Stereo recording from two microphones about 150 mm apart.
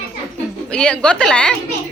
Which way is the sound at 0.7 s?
5° left (ahead or behind).